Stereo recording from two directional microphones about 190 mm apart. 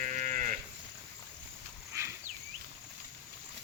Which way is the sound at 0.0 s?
40° right (ahead or behind).